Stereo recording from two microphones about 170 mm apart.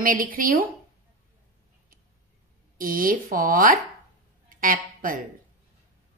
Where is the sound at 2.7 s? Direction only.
55° right (ahead or behind).